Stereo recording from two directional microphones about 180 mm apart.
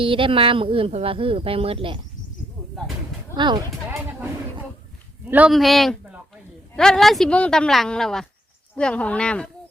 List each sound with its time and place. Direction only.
0.0 s speech: 30° right (ahead or behind)
3.3 s speech: 25° right (ahead or behind)
3.8 s a sound: 10° right (ahead or behind)
5.3 s speech: 5° right (ahead or behind)